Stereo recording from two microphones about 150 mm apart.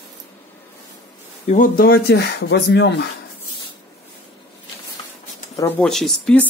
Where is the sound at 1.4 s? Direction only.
60° left (ahead or behind); by 2.2 s 90° left.